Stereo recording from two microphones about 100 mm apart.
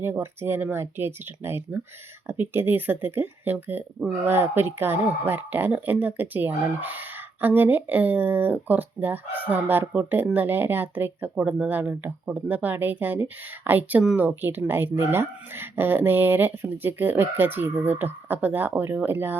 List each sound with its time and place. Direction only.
0.0 s speech: 25° right (ahead or behind)